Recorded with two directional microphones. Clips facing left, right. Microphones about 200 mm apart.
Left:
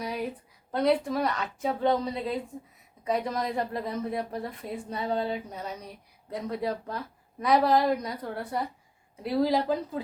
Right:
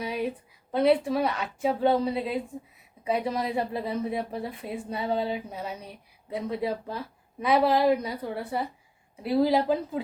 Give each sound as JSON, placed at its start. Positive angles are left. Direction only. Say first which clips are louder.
{"t": 0.7, "sound": "a woman's voice", "louder": "right 3 dB", "side_deg": -5}